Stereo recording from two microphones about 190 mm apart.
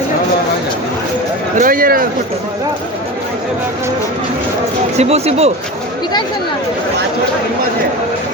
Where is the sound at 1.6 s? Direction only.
45° right (ahead or behind).